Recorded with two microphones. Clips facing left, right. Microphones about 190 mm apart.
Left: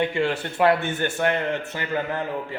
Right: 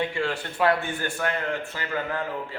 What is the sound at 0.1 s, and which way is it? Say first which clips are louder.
A man's voice: left 4 dB; 20° left (ahead or behind).